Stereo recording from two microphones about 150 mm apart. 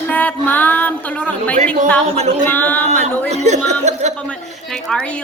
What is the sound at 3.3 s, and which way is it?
Music, 50° right (ahead or behind).